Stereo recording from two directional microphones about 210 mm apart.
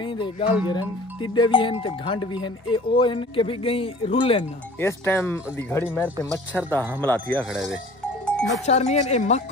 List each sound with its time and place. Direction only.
0.0 s speech: 25° left (ahead or behind)
4.7 s speech: 10° left (ahead or behind)
7.0 s speech: 10° left (ahead or behind)
7.5 s speech: 5° right (ahead or behind)
8.3 s cowbell: 5° left (ahead or behind)
8.6 s speech: 30° left (ahead or behind)